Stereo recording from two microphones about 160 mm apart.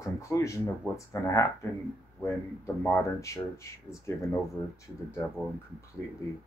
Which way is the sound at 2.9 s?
15° left (ahead or behind).